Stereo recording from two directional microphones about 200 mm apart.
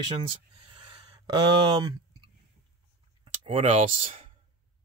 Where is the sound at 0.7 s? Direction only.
25° right (ahead or behind).